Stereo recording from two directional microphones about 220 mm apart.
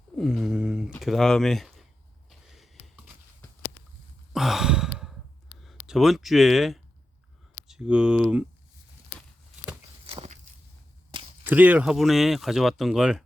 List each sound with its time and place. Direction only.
0.2 s pigeon: centre (ahead or behind)
2.5 s a sound: centre (ahead or behind)
4.3 s sigh: centre (ahead or behind)
5.5 s speech: centre (ahead or behind)
10.1 s walk: 25° right (ahead or behind)
11.1 s whip: 25° right (ahead or behind)
11.4 s speech: 5° right (ahead or behind)